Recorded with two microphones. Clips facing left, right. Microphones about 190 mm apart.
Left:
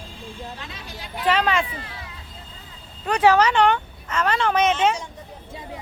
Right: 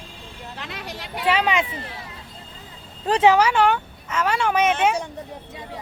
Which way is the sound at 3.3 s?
10° right (ahead or behind).